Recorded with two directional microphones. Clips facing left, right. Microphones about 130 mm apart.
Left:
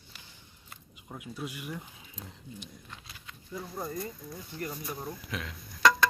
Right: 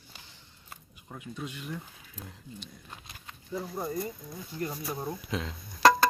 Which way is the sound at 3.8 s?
10° right (ahead or behind).